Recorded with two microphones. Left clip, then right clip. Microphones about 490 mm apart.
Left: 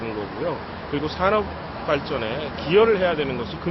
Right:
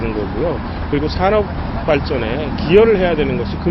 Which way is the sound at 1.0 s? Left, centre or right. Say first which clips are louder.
Right 5 dB; right.